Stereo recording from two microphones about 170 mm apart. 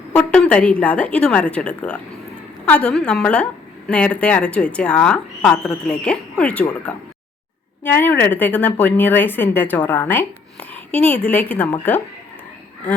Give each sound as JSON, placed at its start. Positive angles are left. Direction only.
{"t": 0.1, "sound": "a woman's voice", "side_deg": 5}